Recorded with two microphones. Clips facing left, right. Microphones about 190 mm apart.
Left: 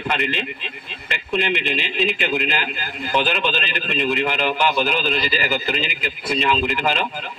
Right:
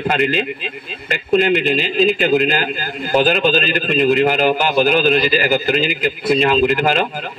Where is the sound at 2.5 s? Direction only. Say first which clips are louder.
Right 6 dB; 40° right (ahead or behind).